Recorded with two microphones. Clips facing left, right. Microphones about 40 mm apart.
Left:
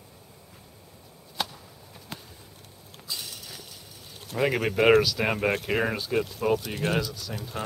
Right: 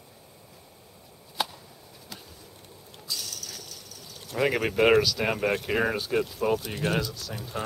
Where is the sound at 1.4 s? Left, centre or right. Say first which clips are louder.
Right 1 dB; centre.